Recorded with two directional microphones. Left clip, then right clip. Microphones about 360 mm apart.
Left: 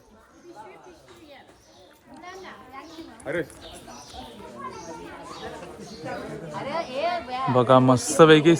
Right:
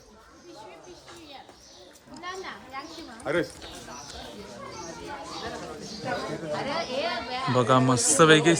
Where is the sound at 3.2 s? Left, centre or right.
Right.